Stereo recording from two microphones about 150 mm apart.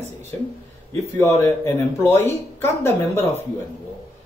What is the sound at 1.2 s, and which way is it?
Speech, 20° left (ahead or behind).